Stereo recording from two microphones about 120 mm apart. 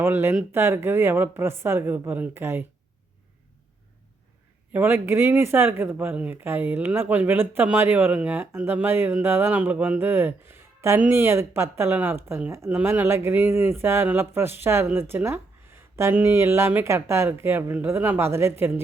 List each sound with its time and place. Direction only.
0.0 s speech: 20° right (ahead or behind)
4.7 s speech: 20° right (ahead or behind)